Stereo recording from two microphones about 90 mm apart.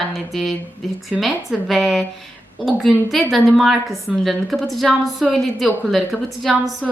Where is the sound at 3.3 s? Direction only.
Centre (ahead or behind).